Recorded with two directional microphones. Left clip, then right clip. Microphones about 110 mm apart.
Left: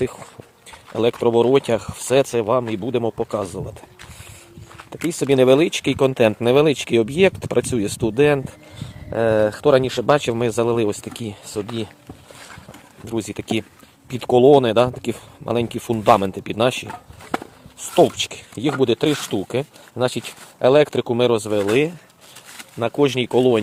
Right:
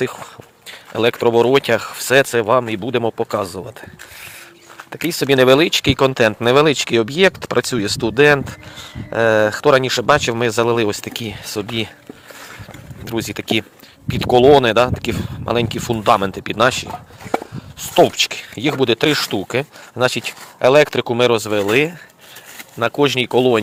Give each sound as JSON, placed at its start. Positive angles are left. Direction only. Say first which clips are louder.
{"t": 0.0, "sound": "speech", "louder": "right 2 dB", "side_deg": 30}
{"t": 4.9, "sound": "speech", "louder": "right 3 dB", "side_deg": 25}
{"t": 13.1, "sound": "speech", "louder": "right 4 dB", "side_deg": 20}
{"t": 17.3, "sound": "walk", "louder": "right 5 dB", "side_deg": 25}
{"t": 17.9, "sound": "speech", "louder": "right 3 dB", "side_deg": 25}